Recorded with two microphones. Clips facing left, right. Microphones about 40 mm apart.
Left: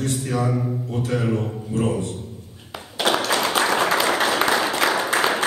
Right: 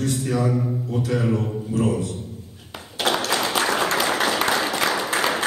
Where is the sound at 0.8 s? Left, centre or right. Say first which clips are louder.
Right 1 dB; left.